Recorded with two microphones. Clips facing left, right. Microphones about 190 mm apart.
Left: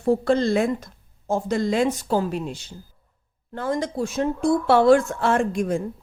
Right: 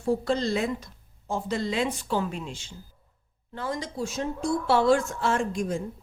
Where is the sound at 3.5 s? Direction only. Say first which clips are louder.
Left 7 dB; 50° left (ahead or behind).